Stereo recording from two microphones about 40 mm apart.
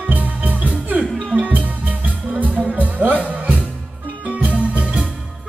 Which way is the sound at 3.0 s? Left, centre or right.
Right.